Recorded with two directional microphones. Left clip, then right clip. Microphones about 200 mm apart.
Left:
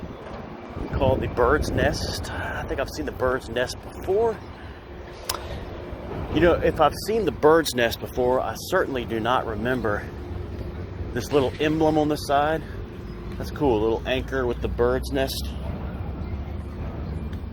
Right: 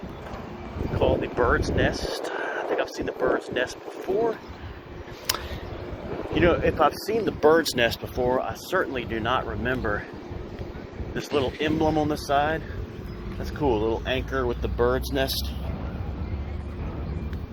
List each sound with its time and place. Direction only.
0.9 s speech: 35° left (ahead or behind)
5.3 s a sound: centre (ahead or behind)
6.3 s speech: 25° left (ahead or behind)
11.1 s speech: 25° left (ahead or behind); by 15.4 s centre (ahead or behind)